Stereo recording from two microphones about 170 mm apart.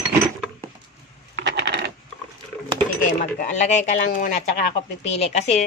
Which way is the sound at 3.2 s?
45° left (ahead or behind).